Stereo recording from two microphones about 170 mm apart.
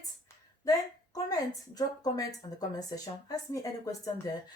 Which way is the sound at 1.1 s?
20° left (ahead or behind).